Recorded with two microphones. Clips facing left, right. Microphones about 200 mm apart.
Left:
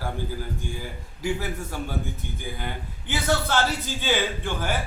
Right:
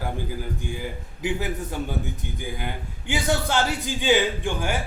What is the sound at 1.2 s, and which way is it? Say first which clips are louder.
A woman's voice: right 1 dB; 20° right (ahead or behind).